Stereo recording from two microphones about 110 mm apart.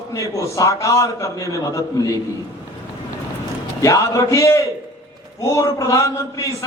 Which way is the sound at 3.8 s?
30° left (ahead or behind).